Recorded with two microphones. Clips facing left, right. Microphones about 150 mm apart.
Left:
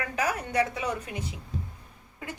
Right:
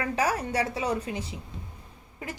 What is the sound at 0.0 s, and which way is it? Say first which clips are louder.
A woman's voice: right 3 dB; 30° right (ahead or behind).